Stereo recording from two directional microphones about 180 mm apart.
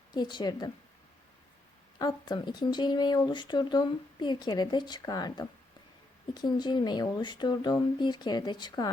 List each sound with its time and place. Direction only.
0.1 s speech: 25° left (ahead or behind)
2.0 s speech: 25° left (ahead or behind)